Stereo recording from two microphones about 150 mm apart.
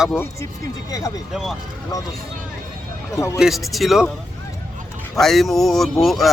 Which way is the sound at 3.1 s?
20° left (ahead or behind).